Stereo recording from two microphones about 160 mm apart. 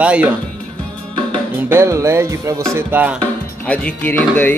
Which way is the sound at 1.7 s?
15° right (ahead or behind).